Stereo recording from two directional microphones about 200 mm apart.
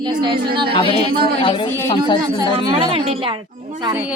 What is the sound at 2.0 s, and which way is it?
A woman's voice, 20° right (ahead or behind).